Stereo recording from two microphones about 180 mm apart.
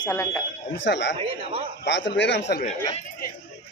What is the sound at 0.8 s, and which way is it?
A man's voice, 75° left (ahead or behind).